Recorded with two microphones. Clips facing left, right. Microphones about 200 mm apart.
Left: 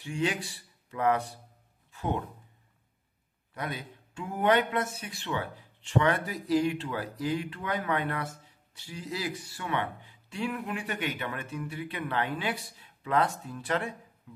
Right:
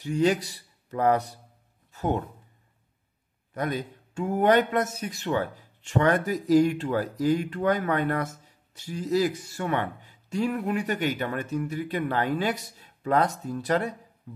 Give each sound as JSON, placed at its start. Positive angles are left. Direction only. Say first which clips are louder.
{"t": 0.0, "sound": "speech", "louder": "right 7 dB", "side_deg": -40}
{"t": 1.9, "sound": "music", "louder": "right 5 dB", "side_deg": -40}
{"t": 3.5, "sound": "speech", "louder": "right 7 dB", "side_deg": -45}